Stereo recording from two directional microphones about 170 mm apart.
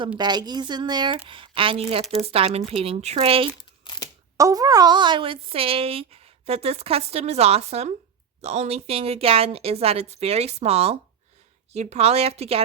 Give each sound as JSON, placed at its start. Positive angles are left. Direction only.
{"t": 0.2, "sound": "speech", "side_deg": -25}
{"t": 3.6, "sound": "crumpling", "side_deg": 25}
{"t": 4.4, "sound": "speech", "side_deg": -20}